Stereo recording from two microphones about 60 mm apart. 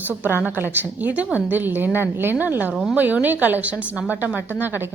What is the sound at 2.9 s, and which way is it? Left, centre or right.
A woman's voice, right.